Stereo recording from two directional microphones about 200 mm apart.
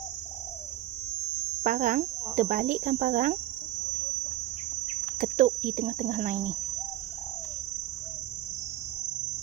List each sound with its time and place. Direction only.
1.6 s speech: 45° right (ahead or behind)
5.2 s cricket: 40° right (ahead or behind)